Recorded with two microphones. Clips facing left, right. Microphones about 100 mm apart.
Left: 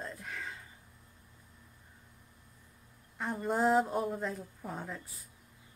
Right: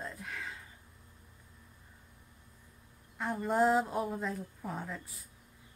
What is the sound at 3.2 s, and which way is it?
Speech, centre (ahead or behind).